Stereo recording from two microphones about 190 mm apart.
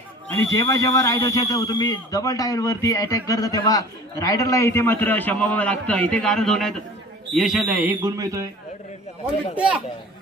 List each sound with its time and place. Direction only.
0.4 s a man's voice: 15° left (ahead or behind); by 8.5 s 15° right (ahead or behind)